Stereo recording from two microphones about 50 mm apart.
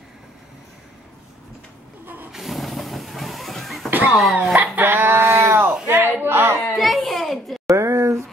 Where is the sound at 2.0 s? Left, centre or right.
Right.